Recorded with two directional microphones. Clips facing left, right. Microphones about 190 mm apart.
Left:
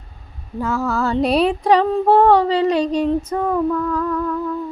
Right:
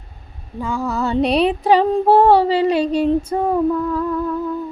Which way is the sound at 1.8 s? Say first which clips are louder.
Right 2 dB; 30° right (ahead or behind).